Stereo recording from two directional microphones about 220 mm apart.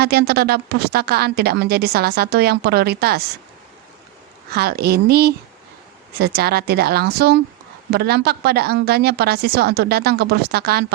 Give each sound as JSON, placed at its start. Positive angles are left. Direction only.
{"t": 0.0, "sound": "a woman's voice", "side_deg": -45}
{"t": 4.5, "sound": "a woman's voice", "side_deg": -45}